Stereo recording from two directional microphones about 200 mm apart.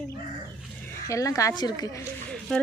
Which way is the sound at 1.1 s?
15° left (ahead or behind).